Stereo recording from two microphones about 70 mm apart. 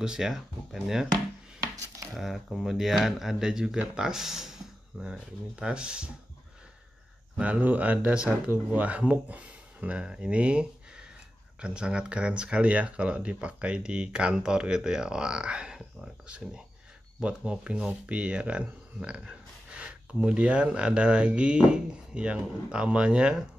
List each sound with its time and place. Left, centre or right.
0.0 s speech: centre
2.1 s speech: centre
7.3 s speech: centre